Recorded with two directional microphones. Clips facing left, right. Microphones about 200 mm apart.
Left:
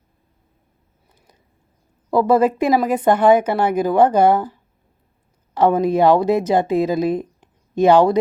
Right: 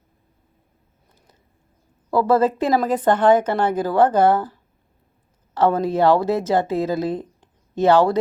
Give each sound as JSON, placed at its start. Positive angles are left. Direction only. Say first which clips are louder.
{"t": 2.0, "sound": "speech", "louder": "left 2 dB", "side_deg": 15}
{"t": 5.5, "sound": "speech", "louder": "left 3 dB", "side_deg": 15}